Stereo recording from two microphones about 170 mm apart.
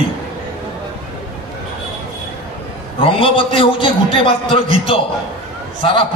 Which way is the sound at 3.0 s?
30° left (ahead or behind).